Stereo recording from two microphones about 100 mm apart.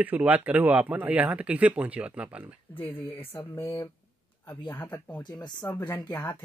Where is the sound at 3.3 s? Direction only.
25° left (ahead or behind).